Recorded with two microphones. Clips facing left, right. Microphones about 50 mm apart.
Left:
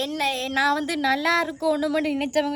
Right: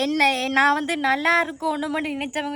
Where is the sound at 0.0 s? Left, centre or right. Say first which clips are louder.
Right 5 dB; right.